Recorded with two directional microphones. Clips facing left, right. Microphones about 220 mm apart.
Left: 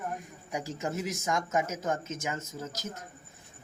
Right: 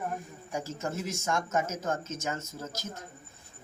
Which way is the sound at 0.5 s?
15° left (ahead or behind).